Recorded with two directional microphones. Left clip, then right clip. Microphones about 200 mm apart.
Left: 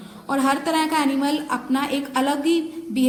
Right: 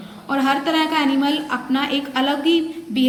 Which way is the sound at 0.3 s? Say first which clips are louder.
Right 2 dB; 40° left (ahead or behind).